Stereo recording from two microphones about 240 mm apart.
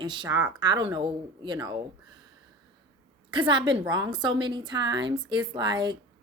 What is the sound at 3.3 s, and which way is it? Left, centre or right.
A woman's voice, centre.